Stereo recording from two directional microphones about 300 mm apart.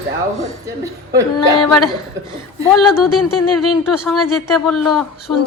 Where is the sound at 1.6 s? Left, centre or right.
Centre.